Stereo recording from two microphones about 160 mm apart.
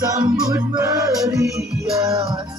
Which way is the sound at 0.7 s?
20° right (ahead or behind).